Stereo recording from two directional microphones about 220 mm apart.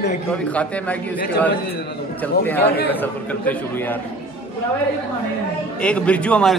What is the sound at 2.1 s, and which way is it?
A man's voice, 10° left (ahead or behind).